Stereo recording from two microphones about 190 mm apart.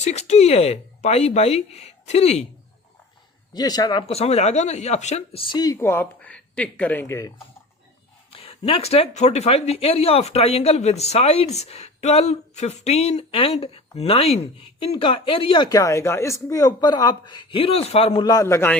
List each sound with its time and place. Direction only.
0.0 s speech: 35° left (ahead or behind)
3.5 s speech: 20° left (ahead or behind)
8.3 s speech: 30° left (ahead or behind); by 18.8 s 10° left (ahead or behind)